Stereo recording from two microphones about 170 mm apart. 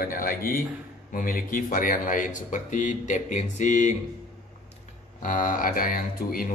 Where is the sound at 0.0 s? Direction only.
60° left (ahead or behind).